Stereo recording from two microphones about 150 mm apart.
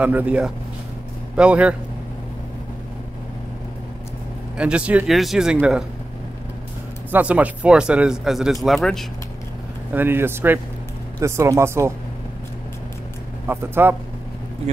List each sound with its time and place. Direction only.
0.0 s speech: 10° right (ahead or behind)
4.6 s speech: 5° right (ahead or behind)
7.1 s speech: 10° right (ahead or behind)
9.9 s speech: 15° right (ahead or behind)
13.5 s speech: 15° right (ahead or behind)